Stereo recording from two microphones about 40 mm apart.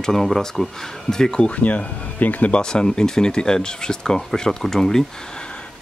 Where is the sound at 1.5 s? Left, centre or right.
Left.